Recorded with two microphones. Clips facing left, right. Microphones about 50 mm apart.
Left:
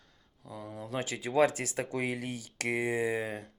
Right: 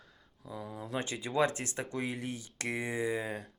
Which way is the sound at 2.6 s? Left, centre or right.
Left.